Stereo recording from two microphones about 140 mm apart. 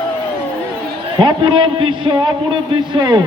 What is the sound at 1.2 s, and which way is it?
A man's voice, 35° right (ahead or behind).